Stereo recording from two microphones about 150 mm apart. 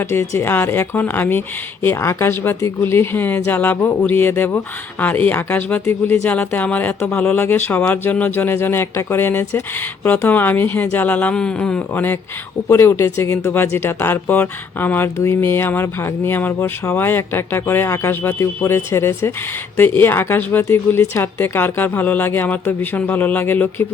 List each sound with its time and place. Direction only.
0.0 s a woman's voice: 15° left (ahead or behind)